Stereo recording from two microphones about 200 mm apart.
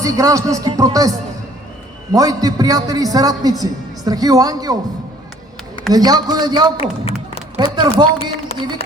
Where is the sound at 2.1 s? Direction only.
20° right (ahead or behind).